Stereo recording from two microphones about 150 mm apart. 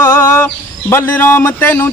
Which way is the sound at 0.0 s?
15° left (ahead or behind).